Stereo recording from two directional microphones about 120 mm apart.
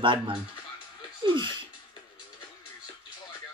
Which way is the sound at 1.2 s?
40° right (ahead or behind).